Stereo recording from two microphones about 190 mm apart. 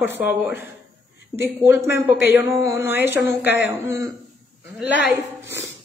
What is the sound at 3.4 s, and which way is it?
Speech, 65° left (ahead or behind).